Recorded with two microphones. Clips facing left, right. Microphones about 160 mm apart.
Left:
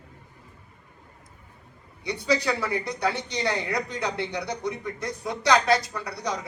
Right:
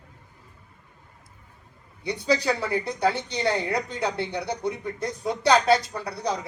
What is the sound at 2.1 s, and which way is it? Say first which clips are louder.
Speech: right 1 dB; 30° right (ahead or behind).